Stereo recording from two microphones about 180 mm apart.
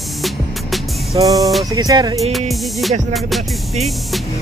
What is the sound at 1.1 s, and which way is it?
Music, 20° right (ahead or behind).